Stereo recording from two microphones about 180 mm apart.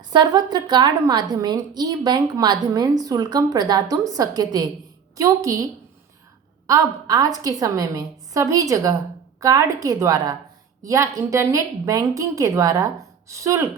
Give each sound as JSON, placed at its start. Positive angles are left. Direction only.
{"t": 0.1, "sound": "a woman's voice", "side_deg": -25}
{"t": 6.7, "sound": "a woman's voice", "side_deg": -20}